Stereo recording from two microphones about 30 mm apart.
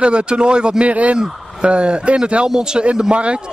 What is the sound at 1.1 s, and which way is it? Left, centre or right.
Speech, right.